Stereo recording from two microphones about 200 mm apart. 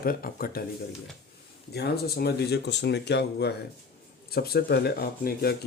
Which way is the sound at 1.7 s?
55° left (ahead or behind).